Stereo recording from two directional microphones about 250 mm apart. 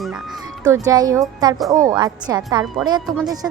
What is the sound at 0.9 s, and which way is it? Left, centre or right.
A woman's voice, centre.